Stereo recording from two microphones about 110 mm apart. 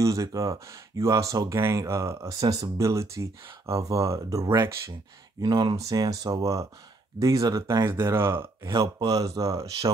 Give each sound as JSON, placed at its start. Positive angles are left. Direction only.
{"t": 0.0, "sound": "speech", "side_deg": -30}
{"t": 5.4, "sound": "speech", "side_deg": -40}
{"t": 8.7, "sound": "speech", "side_deg": -30}